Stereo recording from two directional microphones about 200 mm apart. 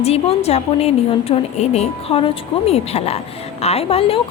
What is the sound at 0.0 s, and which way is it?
A woman's voice, 30° left (ahead or behind).